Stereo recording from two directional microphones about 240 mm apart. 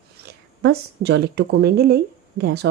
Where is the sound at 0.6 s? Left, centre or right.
Right.